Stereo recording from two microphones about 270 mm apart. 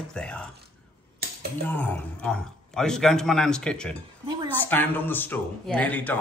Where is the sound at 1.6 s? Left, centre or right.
Centre.